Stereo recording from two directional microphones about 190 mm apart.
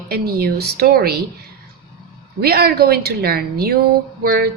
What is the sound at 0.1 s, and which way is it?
A woman's voice, 55° right (ahead or behind).